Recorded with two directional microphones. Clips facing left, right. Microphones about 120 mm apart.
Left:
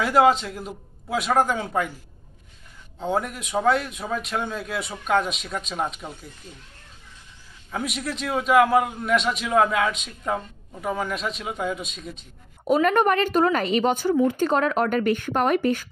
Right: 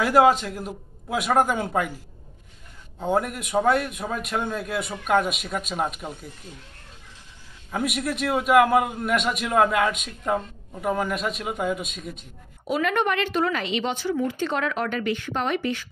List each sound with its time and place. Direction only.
0.0 s a man's voice: centre (ahead or behind)
3.0 s a man's voice: 5° right (ahead or behind)
7.7 s a man's voice: centre (ahead or behind)
12.6 s speech: 40° left (ahead or behind)